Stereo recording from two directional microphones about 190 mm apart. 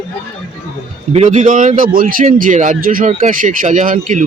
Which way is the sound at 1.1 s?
35° right (ahead or behind).